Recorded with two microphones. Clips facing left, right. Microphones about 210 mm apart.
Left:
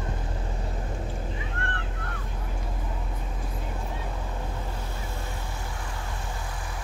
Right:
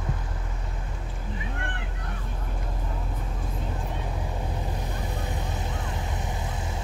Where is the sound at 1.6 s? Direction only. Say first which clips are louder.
Left 1 dB; 15° right (ahead or behind).